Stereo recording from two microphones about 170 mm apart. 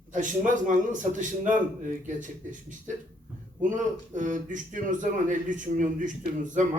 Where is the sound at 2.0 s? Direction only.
50° right (ahead or behind).